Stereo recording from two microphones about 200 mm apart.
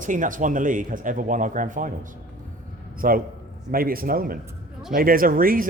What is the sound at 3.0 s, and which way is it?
A man's voice, 45° right (ahead or behind).